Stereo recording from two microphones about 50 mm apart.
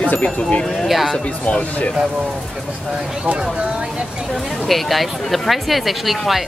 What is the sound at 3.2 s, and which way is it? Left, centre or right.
Speech, right.